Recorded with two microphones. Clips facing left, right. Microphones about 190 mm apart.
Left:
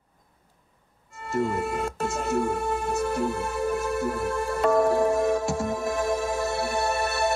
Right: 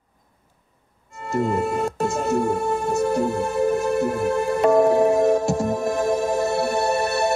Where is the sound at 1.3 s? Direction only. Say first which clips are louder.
Right 4 dB; 45° right (ahead or behind).